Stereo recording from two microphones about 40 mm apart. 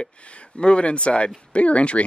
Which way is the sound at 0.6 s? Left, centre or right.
Left.